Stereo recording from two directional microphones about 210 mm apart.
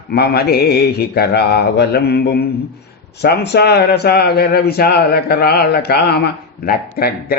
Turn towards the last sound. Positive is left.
turn(degrees=45)  # may be behind; listen again after turning